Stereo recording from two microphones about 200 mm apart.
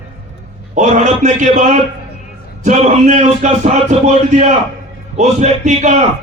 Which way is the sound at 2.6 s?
40° right (ahead or behind).